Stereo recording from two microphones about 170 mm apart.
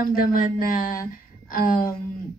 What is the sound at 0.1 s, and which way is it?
A woman's voice, 55° left (ahead or behind).